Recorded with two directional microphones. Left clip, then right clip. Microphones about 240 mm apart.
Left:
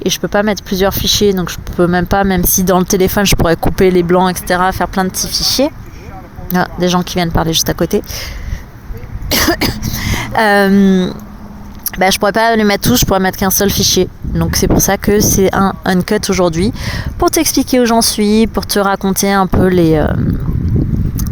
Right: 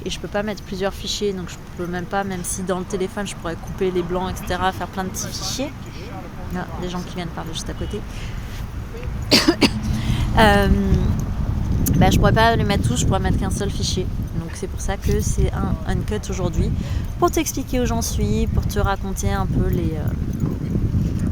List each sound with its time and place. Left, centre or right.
0.0 s speech: left
9.3 s a sound: left
11.9 s speech: left